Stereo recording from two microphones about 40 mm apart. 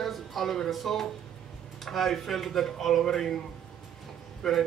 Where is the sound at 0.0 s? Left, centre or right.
Centre.